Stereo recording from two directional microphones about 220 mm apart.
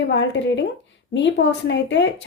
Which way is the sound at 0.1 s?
55° left (ahead or behind).